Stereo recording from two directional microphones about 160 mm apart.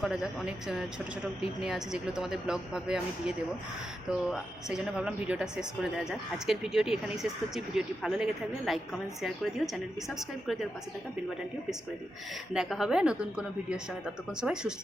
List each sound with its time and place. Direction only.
0.0 s speech: 5° right (ahead or behind)
12.5 s speech: 5° right (ahead or behind)